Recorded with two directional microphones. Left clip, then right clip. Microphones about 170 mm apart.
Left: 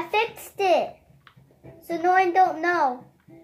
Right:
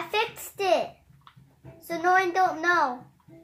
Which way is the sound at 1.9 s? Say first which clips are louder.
Left 3 dB; 10° left (ahead or behind).